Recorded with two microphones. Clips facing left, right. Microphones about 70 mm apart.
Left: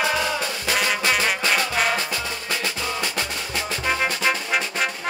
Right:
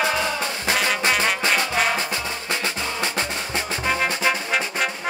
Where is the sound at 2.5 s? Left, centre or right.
Right.